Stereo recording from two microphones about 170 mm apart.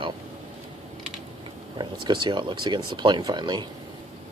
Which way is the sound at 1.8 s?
25° right (ahead or behind).